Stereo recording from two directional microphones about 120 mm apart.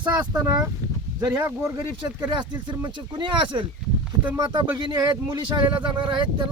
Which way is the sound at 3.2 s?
40° right (ahead or behind).